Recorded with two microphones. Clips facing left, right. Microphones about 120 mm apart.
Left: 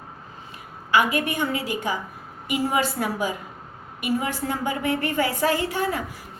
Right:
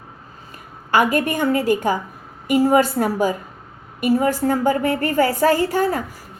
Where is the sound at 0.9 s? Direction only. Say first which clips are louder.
Right 4 dB; 45° right (ahead or behind).